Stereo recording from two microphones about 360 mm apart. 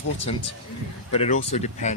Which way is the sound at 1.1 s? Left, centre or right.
Centre.